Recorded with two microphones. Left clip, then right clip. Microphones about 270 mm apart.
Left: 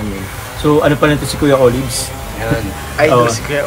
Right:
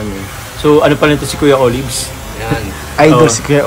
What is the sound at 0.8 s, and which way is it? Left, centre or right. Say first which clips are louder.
Speech: right 2 dB; right.